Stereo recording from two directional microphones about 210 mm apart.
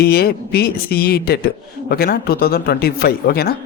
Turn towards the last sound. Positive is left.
turn(degrees=45)  # may be behind; listen again after turning